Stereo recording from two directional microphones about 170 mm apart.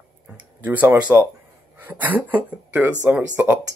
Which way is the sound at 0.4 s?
10° right (ahead or behind).